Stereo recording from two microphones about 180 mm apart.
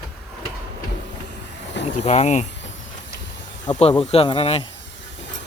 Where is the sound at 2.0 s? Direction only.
40° left (ahead or behind).